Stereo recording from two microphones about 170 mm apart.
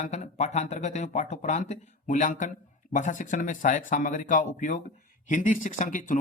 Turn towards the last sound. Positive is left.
turn(degrees=50)  # may be behind; listen again after turning